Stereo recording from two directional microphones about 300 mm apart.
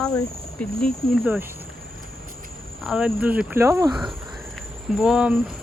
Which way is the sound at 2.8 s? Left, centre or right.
Centre.